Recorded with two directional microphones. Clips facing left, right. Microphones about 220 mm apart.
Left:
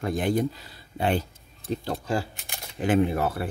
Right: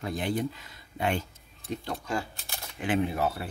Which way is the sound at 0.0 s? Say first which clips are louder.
Left 5 dB; 50° left (ahead or behind).